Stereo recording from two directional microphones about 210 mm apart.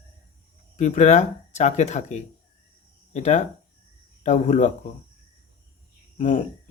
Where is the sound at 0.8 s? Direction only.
35° left (ahead or behind).